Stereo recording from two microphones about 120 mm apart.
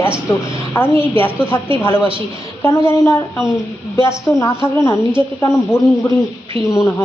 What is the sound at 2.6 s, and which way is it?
Speech, 25° left (ahead or behind).